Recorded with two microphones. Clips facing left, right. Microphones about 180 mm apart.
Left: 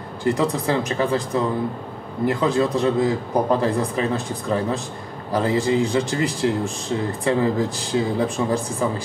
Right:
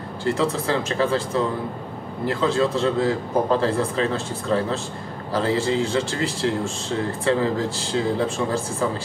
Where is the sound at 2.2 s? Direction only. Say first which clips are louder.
Left 1 dB; 15° left (ahead or behind).